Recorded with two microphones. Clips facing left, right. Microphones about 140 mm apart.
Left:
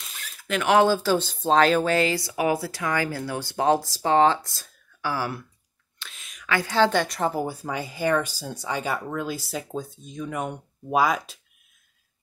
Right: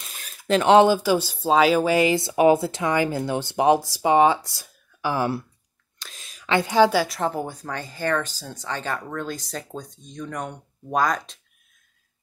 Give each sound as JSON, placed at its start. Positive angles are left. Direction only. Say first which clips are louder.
{"t": 0.5, "sound": "speech", "louder": "right 4 dB", "side_deg": -30}
{"t": 4.6, "sound": "a sound", "louder": "right 3 dB", "side_deg": -20}
{"t": 5.9, "sound": "a woman's voice", "louder": "even", "side_deg": -35}